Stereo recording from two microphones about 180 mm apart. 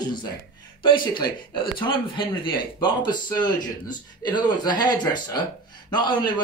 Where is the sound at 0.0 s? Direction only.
25° left (ahead or behind).